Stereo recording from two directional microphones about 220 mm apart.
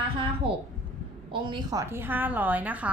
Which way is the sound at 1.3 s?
20° right (ahead or behind).